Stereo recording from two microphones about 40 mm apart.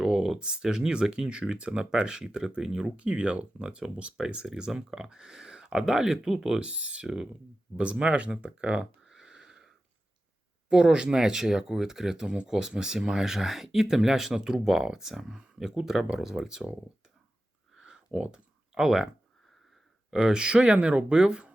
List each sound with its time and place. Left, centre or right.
0.0 s speech: centre
6.6 s speech: right
9.0 s a sound: centre
10.7 s speech: right
17.7 s a sound: centre
18.7 s speech: centre
20.1 s speech: centre
21.1 s speech: centre